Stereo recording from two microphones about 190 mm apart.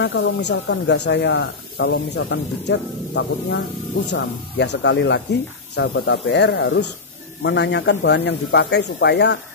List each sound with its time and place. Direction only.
0.0 s speech: 65° left (ahead or behind)